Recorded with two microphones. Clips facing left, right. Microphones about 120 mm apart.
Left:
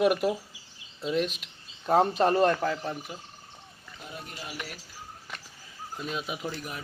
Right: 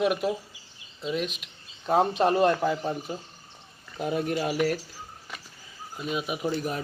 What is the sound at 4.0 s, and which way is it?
Speech, 65° right (ahead or behind).